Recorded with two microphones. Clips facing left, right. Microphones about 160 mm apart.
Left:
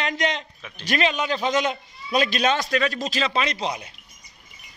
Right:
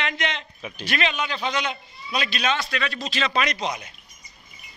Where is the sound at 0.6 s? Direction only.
15° right (ahead or behind).